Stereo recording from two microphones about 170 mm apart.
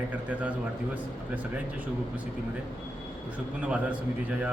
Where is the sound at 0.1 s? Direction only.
10° right (ahead or behind).